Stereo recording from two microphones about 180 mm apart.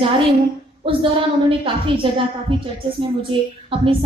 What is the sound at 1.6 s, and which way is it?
A woman's voice, 30° right (ahead or behind).